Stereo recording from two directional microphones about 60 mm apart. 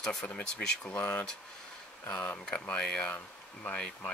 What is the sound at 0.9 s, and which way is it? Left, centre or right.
Speech, left.